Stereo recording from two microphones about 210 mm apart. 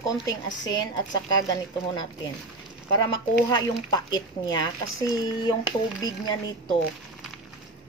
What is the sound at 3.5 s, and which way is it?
A woman's voice, 20° left (ahead or behind).